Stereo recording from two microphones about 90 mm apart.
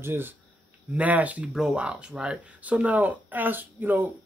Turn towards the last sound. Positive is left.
turn(degrees=-20)  # may be behind; listen again after turning